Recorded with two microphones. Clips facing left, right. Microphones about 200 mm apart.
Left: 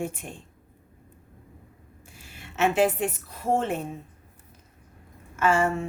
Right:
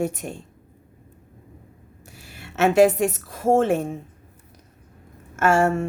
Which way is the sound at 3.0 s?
85° right.